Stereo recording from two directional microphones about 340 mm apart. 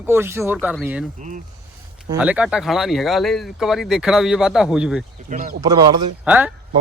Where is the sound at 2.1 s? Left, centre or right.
Centre.